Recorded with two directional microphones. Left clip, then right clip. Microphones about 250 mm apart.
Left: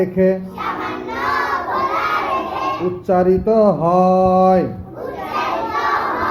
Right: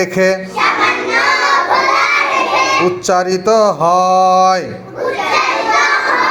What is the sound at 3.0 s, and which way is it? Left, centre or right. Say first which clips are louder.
Mantra: right 3 dB; centre.